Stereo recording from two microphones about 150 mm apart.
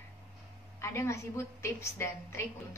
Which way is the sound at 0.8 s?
20° left (ahead or behind).